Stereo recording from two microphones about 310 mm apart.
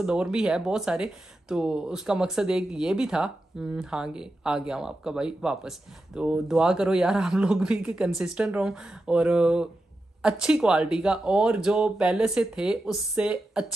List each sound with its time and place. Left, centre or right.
0.0 s speech: centre